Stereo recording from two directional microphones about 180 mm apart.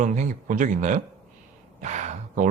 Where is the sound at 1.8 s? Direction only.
40° right (ahead or behind).